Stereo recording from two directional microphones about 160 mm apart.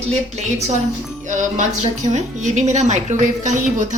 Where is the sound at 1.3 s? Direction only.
50° right (ahead or behind).